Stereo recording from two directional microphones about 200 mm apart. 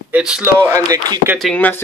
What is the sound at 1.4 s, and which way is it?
Speech, 5° left (ahead or behind).